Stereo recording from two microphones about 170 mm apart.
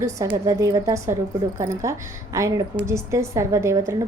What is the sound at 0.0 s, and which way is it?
A woman's voice, 20° right (ahead or behind).